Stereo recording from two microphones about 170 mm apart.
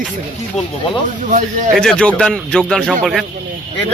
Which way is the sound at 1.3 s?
45° right (ahead or behind).